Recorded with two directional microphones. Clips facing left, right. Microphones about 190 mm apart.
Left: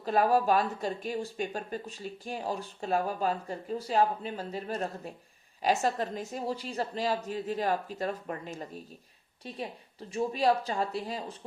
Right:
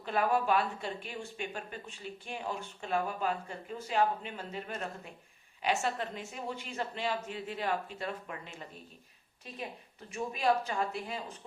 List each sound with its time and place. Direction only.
0.0 s speech: 40° left (ahead or behind)